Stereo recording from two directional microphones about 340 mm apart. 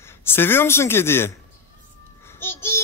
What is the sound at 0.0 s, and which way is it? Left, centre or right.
A man's voice, centre.